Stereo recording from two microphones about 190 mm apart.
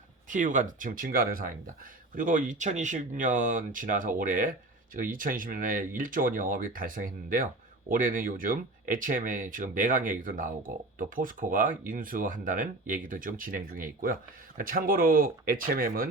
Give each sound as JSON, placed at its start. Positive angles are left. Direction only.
{"t": 0.3, "sound": "speech", "side_deg": -45}